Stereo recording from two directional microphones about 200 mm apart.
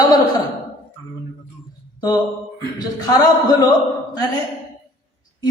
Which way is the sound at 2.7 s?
20° left (ahead or behind).